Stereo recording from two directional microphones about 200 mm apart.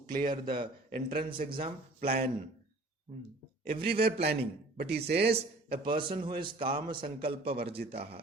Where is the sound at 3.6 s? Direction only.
50° right (ahead or behind).